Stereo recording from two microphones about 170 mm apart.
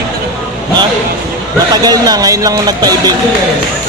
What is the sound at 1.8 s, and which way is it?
Speech, 20° right (ahead or behind).